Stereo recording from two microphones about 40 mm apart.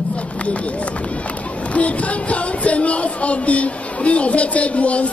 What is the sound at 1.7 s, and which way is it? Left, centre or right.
A man's voice, left.